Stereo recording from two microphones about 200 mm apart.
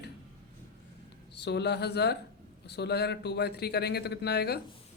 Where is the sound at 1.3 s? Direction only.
55° left (ahead or behind).